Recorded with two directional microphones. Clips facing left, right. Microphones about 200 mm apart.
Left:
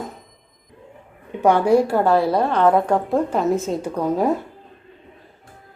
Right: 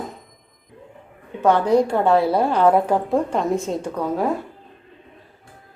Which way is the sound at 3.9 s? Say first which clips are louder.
Left 3 dB; 15° left (ahead or behind).